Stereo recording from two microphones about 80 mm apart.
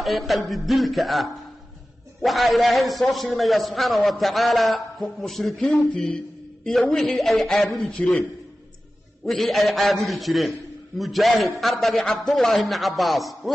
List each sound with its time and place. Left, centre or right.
0.0 s a man's voice: centre
7.2 s a man's voice: centre
7.9 s a man's voice: centre
9.2 s a man's voice: centre